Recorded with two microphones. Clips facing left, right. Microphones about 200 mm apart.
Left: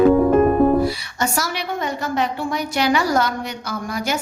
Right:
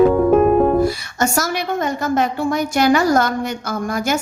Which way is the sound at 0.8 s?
45° right (ahead or behind).